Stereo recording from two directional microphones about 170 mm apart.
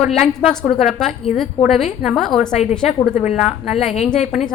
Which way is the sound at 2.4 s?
45° left (ahead or behind).